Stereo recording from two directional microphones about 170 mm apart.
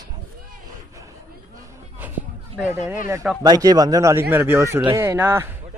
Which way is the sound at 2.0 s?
10° right (ahead or behind).